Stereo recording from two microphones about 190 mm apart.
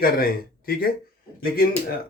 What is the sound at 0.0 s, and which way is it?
Speech, 50° left (ahead or behind).